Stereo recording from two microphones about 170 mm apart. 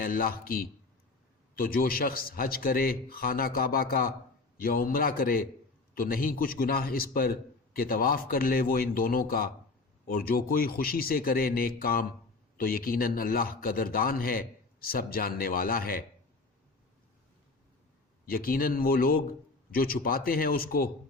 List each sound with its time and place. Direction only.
0.0 s a man's voice: 60° left (ahead or behind)
18.3 s a man's voice: 60° left (ahead or behind)